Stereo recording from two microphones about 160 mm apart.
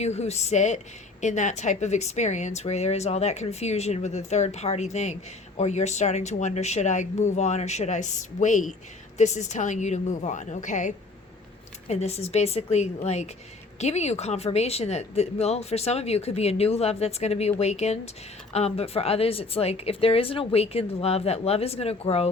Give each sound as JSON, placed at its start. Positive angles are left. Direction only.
{"t": 0.0, "sound": "a woman's voice", "side_deg": 40}